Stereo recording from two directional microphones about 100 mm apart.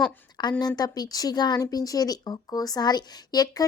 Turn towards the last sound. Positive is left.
turn(degrees=40)  # may be behind; listen again after turning